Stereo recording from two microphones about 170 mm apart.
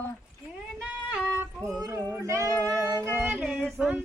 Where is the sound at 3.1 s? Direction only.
10° right (ahead or behind).